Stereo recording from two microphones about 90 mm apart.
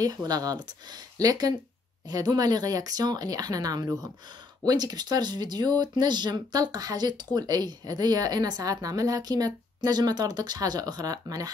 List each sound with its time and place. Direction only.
0.0 s speech: 45° right (ahead or behind)